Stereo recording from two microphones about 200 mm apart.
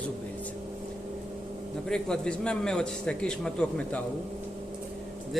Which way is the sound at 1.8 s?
5° left (ahead or behind).